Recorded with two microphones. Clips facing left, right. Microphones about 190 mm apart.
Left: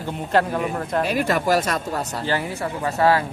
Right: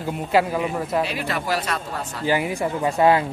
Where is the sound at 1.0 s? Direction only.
45° left (ahead or behind).